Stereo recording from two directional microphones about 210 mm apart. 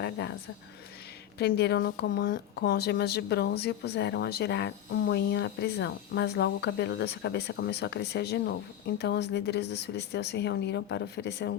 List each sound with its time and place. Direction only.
1.4 s a woman's voice: 50° left (ahead or behind)